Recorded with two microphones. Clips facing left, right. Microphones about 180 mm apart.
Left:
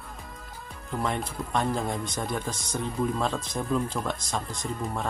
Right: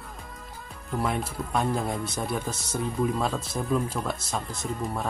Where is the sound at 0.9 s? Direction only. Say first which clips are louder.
Right 1 dB; 5° right (ahead or behind).